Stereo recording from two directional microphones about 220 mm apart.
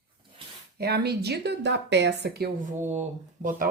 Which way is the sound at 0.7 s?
45° right (ahead or behind).